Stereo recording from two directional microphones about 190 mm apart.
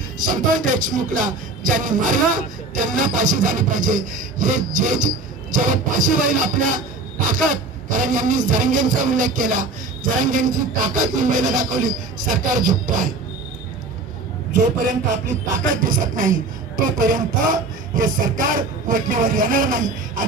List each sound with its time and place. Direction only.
0.2 s speech: 45° right (ahead or behind)
15.8 s speech: 45° right (ahead or behind)